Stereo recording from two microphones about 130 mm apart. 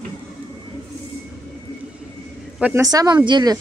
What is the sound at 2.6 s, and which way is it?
Speech, 20° right (ahead or behind).